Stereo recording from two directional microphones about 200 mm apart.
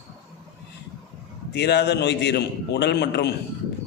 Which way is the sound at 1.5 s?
55° left (ahead or behind).